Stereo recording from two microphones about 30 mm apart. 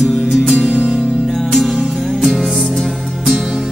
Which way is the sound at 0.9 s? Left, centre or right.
Centre.